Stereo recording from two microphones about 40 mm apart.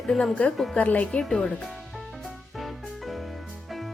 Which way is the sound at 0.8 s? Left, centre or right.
Left.